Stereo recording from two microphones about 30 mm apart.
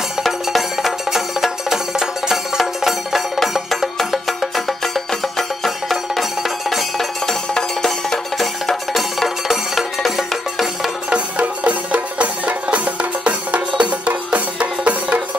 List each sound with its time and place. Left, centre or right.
0.2 s music: centre
4.3 s music: centre
9.5 s music: centre
11.3 s music: right